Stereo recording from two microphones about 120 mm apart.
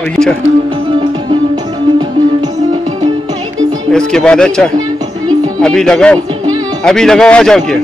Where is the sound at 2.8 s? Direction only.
65° right (ahead or behind).